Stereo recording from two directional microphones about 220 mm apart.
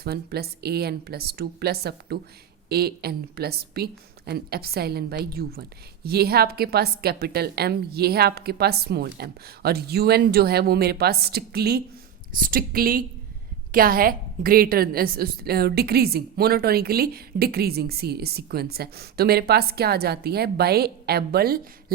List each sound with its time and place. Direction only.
0.0 s a woman's voice: 45° right (ahead or behind)